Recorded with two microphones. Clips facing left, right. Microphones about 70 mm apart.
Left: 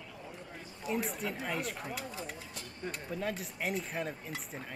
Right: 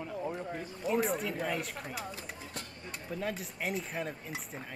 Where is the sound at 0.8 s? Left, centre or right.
Centre.